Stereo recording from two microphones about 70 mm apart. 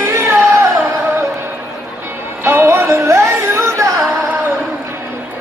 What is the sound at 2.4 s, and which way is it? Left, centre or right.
Music, right.